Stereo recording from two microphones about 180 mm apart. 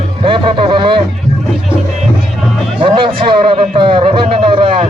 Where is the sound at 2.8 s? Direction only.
30° right (ahead or behind).